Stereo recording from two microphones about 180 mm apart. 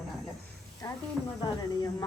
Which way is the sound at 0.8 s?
20° left (ahead or behind).